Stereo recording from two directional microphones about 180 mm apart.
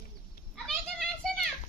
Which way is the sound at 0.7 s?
5° left (ahead or behind).